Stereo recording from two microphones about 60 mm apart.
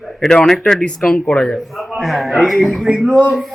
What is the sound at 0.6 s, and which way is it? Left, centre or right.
Speech, centre.